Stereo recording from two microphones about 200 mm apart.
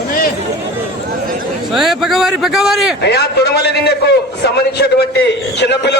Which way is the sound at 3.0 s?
55° left (ahead or behind).